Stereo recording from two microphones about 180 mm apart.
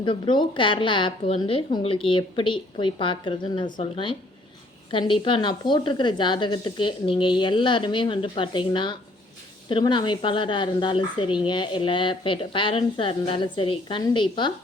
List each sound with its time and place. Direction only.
0.0 s a woman's voice: 25° left (ahead or behind)